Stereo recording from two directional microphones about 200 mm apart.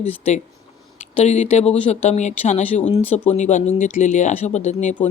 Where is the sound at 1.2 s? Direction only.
35° left (ahead or behind).